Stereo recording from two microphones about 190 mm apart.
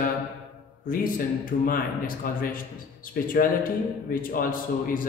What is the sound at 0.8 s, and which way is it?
Speech, 50° left (ahead or behind).